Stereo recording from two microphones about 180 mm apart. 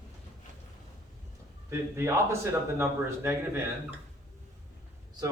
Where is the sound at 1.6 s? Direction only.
15° right (ahead or behind).